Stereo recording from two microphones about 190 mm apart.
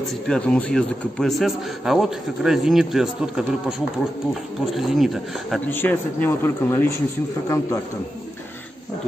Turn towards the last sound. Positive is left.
turn(degrees=15)  # may be behind; listen again after turning